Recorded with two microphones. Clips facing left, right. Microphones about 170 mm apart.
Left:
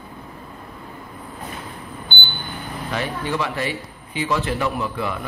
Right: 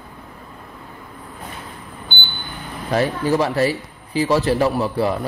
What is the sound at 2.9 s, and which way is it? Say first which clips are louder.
A man's voice: right 7 dB; 40° right (ahead or behind).